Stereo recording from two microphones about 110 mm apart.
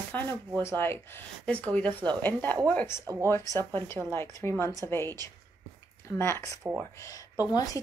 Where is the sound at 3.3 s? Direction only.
25° left (ahead or behind).